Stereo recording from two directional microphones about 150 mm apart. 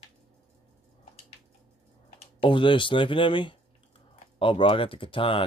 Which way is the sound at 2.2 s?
35° left (ahead or behind).